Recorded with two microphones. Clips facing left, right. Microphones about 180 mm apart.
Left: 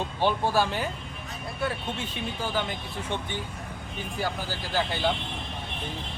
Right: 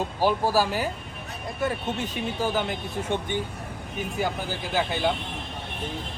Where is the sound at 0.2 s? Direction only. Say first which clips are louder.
Right 2 dB; 5° right (ahead or behind).